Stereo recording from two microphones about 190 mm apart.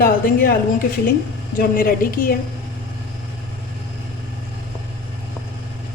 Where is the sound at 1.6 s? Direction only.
50° left (ahead or behind).